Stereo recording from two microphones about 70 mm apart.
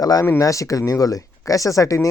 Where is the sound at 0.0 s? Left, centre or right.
Left.